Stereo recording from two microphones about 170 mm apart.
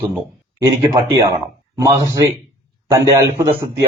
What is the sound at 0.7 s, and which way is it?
A man's voice, 20° right (ahead or behind).